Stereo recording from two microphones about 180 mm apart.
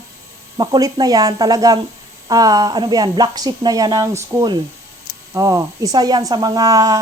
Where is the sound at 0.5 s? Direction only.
20° right (ahead or behind).